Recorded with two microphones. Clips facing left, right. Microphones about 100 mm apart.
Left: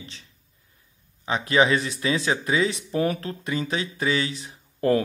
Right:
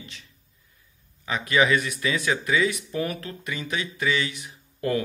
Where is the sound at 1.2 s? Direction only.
30° left (ahead or behind).